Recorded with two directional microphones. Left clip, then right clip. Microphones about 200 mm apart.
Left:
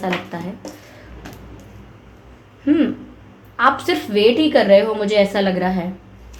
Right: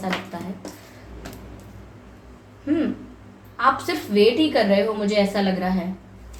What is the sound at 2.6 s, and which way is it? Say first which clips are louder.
Speech: left 6 dB; 50° left (ahead or behind).